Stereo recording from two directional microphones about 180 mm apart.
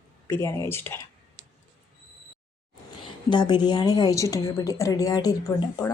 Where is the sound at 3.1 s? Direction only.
25° left (ahead or behind).